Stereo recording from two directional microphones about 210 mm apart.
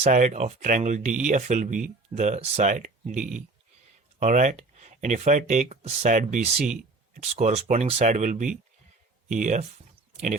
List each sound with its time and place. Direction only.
0.0 s speech: 35° right (ahead or behind)